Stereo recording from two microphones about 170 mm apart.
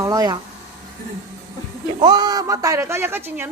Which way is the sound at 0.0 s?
20° right (ahead or behind).